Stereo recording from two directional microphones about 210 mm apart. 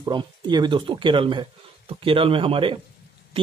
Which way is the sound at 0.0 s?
20° right (ahead or behind).